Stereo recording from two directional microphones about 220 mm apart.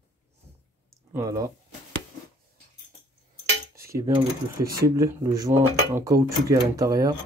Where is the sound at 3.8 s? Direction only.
15° right (ahead or behind).